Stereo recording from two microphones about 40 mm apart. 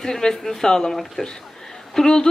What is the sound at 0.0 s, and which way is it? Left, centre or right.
A woman's voice, centre.